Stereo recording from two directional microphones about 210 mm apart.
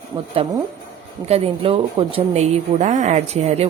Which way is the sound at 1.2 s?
30° right (ahead or behind).